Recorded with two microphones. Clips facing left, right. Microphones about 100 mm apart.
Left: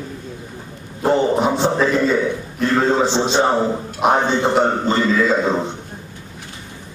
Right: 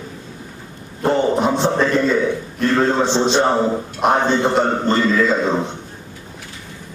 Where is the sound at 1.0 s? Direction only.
5° left (ahead or behind).